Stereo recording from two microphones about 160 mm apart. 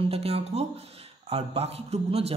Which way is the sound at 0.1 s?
40° right (ahead or behind).